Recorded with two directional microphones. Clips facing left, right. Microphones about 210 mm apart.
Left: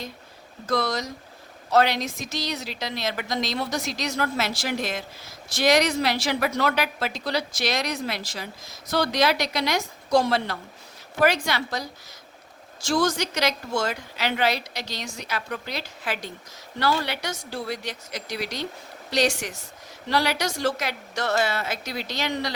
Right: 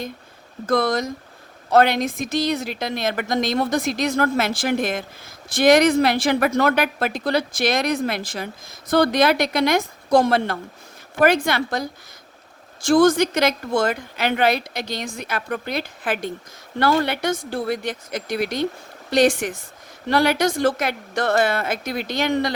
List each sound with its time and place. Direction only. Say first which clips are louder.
0.7 s a woman's voice: right 6 dB; 55° right (ahead or behind)